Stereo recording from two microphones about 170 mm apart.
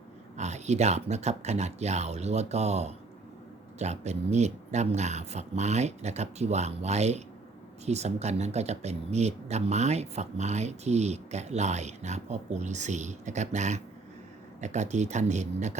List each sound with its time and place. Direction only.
0.3 s speech: 40° right (ahead or behind)